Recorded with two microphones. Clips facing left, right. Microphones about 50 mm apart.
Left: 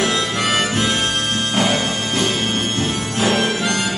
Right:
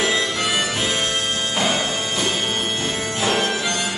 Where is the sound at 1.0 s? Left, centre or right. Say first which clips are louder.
Left 2 dB; left.